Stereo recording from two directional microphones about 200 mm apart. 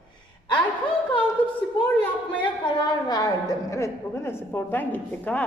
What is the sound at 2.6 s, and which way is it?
A woman's voice, 20° left (ahead or behind).